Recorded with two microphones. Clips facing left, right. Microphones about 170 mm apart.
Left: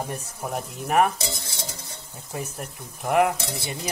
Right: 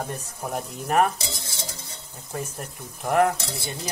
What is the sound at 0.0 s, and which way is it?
Speech, 10° left (ahead or behind).